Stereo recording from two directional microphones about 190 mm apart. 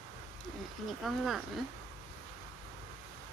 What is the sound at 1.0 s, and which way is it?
Speech, centre (ahead or behind).